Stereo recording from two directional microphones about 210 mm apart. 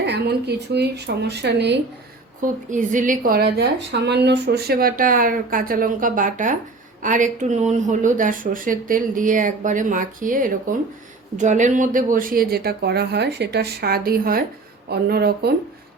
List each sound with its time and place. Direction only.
0.0 s speech: 55° right (ahead or behind)
2.4 s a woman's voice: 35° right (ahead or behind)